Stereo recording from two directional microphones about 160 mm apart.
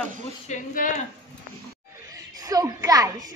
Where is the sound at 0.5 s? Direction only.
50° left (ahead or behind).